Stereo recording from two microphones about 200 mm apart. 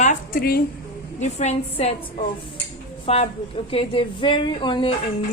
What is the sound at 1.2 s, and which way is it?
Speech, 35° left (ahead or behind).